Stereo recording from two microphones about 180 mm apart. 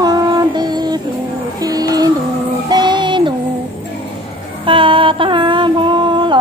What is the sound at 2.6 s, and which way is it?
Child singing, 25° right (ahead or behind).